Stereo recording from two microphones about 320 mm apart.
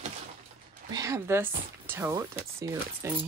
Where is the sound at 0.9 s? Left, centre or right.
Centre.